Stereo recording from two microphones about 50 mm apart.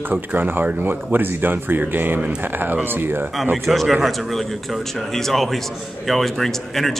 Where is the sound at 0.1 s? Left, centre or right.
Right.